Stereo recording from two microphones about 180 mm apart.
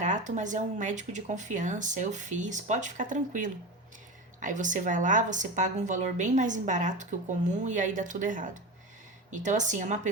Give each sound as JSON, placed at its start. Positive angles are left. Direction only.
{"t": 0.0, "sound": "speech", "side_deg": -40}